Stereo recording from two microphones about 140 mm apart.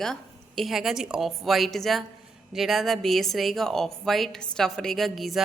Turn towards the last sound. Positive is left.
turn(degrees=0)  # may be behind; listen again after turning